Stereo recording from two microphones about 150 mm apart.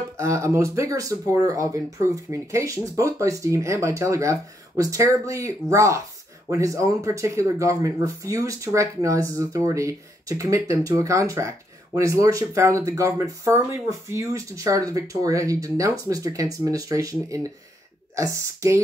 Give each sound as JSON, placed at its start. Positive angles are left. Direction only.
{"t": 0.2, "sound": "speech", "side_deg": -20}